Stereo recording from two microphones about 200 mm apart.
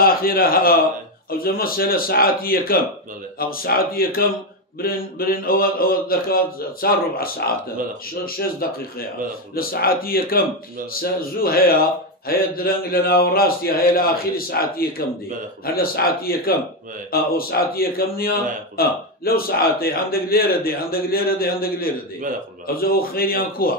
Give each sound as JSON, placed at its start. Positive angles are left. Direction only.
{"t": 0.0, "sound": "a man's voice", "side_deg": 45}